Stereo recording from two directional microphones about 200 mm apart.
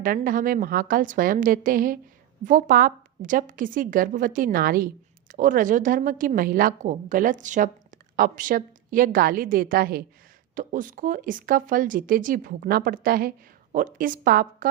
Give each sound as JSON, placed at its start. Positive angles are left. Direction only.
{"t": 0.0, "sound": "a woman's voice", "side_deg": -45}